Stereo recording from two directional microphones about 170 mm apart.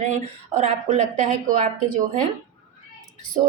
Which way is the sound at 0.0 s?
45° right (ahead or behind).